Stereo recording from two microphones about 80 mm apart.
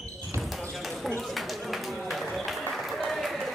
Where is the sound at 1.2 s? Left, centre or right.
Centre.